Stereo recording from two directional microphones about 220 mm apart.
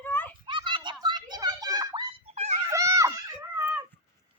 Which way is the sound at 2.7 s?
15° right (ahead or behind).